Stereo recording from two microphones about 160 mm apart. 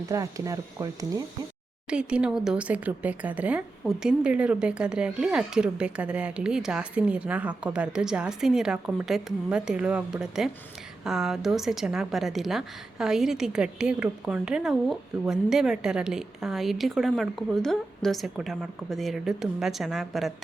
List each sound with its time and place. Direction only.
0.1 s speech: 20° right (ahead or behind)
1.9 s a woman's voice: 5° right (ahead or behind)